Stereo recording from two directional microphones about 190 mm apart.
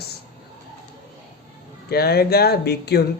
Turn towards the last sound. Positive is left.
turn(degrees=60)  # may be behind; listen again after turning